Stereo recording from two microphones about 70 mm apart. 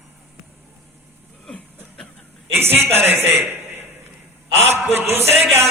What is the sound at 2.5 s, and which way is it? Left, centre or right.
A man's voice, right.